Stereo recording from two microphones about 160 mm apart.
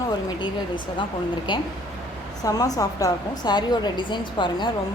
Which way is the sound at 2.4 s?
20° left (ahead or behind).